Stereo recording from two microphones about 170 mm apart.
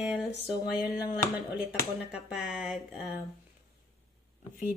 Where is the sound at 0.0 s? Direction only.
5° right (ahead or behind).